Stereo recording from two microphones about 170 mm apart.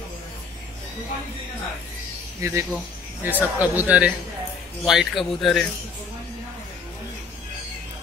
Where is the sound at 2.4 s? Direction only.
15° right (ahead or behind); by 5.6 s centre (ahead or behind).